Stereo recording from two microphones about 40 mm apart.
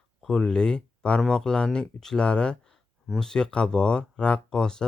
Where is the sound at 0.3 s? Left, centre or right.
Centre.